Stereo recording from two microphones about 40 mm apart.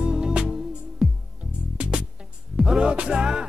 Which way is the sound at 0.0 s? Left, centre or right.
Centre.